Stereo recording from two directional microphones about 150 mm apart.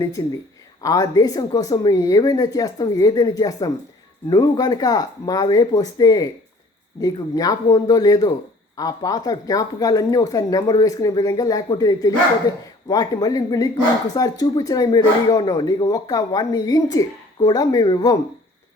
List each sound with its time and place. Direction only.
0.2 s a man's voice: 25° left (ahead or behind)